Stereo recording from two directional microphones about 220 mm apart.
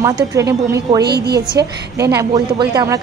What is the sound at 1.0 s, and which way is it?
Speech, 45° right (ahead or behind).